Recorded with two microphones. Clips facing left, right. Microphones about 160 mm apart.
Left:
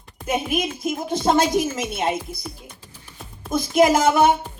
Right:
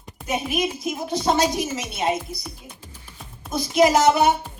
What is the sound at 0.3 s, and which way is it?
Speech, 50° left (ahead or behind).